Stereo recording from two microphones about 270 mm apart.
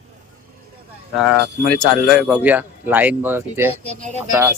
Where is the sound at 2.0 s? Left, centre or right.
Centre.